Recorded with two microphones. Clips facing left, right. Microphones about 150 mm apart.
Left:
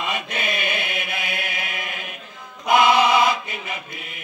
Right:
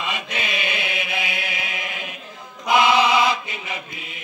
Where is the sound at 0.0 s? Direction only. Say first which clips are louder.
Left 1 dB; 50° left (ahead or behind).